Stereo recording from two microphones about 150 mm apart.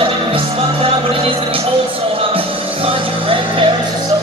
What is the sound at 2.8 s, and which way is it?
Music, 35° right (ahead or behind).